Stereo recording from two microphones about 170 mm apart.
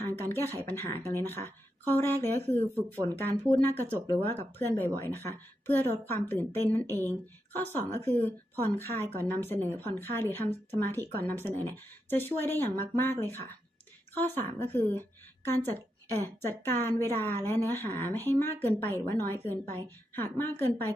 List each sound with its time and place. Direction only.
0.2 s speech: 15° left (ahead or behind)
16.1 s speech: 15° left (ahead or behind)